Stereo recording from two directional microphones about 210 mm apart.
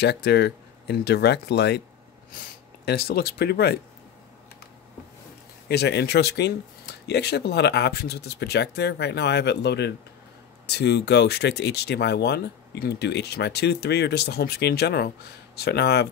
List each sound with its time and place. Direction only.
0.0 s speech: 50° left (ahead or behind)
5.7 s speech: 50° left (ahead or behind)